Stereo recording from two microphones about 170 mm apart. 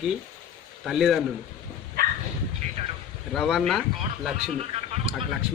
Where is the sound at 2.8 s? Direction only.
35° right (ahead or behind).